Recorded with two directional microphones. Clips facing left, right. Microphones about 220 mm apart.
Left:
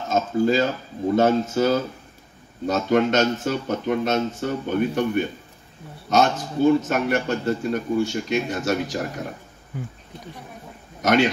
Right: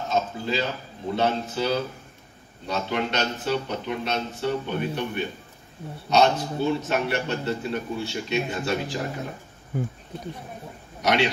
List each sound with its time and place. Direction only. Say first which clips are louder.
0.1 s a man's voice: left 7 dB; 45° left (ahead or behind)
11.0 s a man's voice: left 4 dB; 45° left (ahead or behind)